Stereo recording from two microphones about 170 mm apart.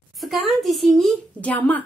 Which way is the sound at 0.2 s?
Centre (ahead or behind).